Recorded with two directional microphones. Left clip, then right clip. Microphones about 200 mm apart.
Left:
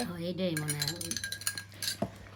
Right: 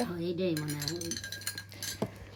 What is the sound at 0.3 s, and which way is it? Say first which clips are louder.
Cutlery: left 1 dB; 60° left (ahead or behind).